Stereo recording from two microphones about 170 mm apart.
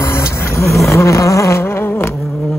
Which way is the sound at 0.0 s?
15° left (ahead or behind).